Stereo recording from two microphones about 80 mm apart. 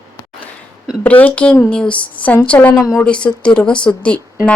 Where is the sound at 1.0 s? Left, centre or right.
Centre.